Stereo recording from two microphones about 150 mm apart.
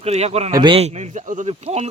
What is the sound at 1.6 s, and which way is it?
Speech, 45° right (ahead or behind).